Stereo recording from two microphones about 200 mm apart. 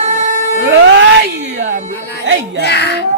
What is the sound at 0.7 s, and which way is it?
Music, 65° right (ahead or behind).